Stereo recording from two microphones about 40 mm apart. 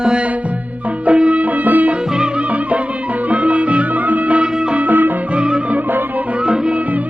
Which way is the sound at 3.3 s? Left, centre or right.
Right.